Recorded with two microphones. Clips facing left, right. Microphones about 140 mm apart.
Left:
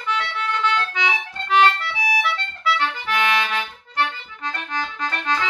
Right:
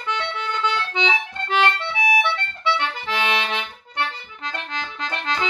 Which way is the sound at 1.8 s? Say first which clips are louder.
Right 3 dB; 20° right (ahead or behind).